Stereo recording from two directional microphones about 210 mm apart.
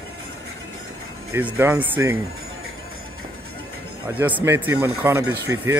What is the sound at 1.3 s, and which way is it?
Speech, 10° right (ahead or behind).